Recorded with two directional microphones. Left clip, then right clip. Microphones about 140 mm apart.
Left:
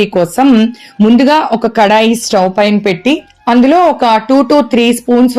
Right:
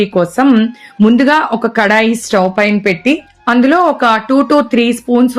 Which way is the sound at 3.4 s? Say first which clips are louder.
Left 2 dB; 15° left (ahead or behind).